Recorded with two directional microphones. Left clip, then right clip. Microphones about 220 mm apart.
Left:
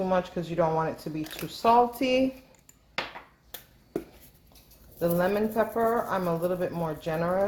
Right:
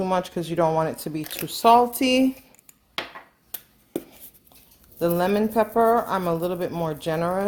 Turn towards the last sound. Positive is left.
turn(degrees=-50)  # may be behind; listen again after turning